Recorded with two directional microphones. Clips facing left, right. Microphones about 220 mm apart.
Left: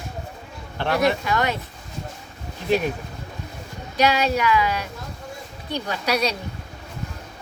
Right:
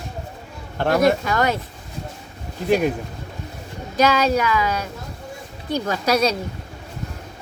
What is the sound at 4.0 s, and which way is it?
Speech, 40° right (ahead or behind).